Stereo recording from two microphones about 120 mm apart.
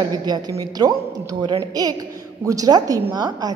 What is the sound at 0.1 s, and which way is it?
A woman's voice, 35° right (ahead or behind).